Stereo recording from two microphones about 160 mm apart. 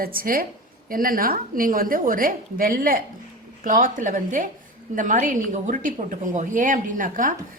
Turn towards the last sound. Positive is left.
turn(degrees=-55)  # may be behind; listen again after turning